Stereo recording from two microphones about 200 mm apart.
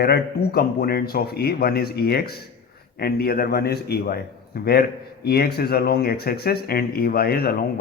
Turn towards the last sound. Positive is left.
turn(degrees=50)  # may be behind; listen again after turning